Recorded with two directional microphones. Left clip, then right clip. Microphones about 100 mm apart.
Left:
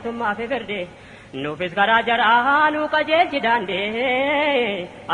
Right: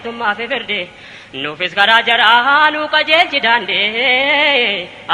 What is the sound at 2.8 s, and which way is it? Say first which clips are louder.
A woman's voice: right 5 dB; 25° right (ahead or behind).